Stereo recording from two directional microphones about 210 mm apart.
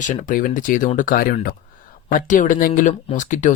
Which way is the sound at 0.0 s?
40° left (ahead or behind).